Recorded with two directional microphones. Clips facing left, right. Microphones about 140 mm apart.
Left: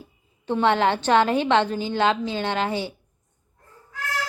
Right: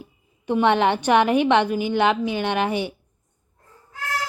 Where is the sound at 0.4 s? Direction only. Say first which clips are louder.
Right 2 dB; 15° right (ahead or behind).